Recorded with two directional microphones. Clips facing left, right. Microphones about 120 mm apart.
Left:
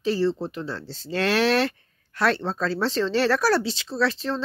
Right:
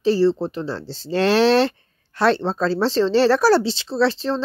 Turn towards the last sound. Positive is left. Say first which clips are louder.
# right 5 dB
turn(degrees=-30)  # may be behind; listen again after turning